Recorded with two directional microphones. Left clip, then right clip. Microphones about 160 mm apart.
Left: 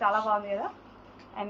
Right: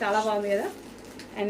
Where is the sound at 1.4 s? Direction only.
35° right (ahead or behind).